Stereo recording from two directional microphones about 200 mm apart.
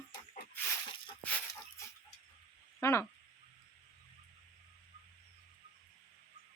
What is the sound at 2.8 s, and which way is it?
Speech, 15° left (ahead or behind).